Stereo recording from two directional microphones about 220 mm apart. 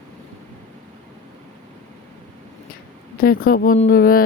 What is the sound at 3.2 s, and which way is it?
Speech, 40° left (ahead or behind).